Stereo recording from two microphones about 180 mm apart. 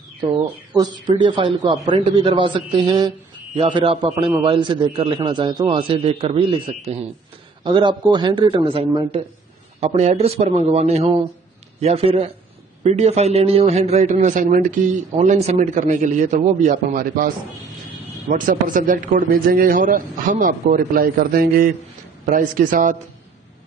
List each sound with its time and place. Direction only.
0.7 s a man's voice: 25° right (ahead or behind); by 17.3 s 50° right (ahead or behind)
18.3 s a man's voice: 50° right (ahead or behind)